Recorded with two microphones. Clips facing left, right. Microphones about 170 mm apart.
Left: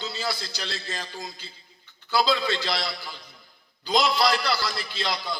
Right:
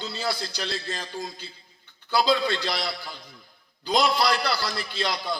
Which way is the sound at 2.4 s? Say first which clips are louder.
Right 1 dB; 55° right (ahead or behind).